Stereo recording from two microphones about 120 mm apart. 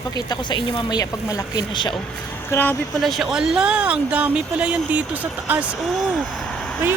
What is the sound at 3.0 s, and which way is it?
Speech, centre (ahead or behind).